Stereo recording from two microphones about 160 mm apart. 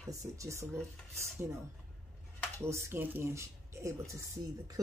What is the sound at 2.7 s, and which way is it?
Speech, 15° right (ahead or behind).